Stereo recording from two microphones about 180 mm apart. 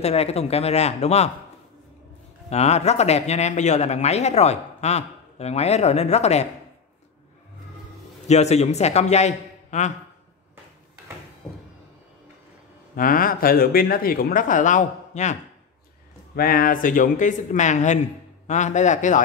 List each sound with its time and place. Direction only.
0.0 s speech: 35° left (ahead or behind)
2.5 s speech: 35° left (ahead or behind)
8.3 s speech: 40° left (ahead or behind)
12.9 s speech: 50° left (ahead or behind)
16.3 s speech: 55° left (ahead or behind)